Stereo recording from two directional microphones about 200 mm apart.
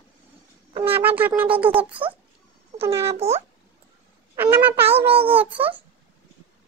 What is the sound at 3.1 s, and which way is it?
Speech, 30° right (ahead or behind).